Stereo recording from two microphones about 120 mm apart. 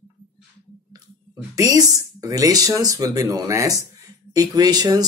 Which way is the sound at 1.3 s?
25° right (ahead or behind).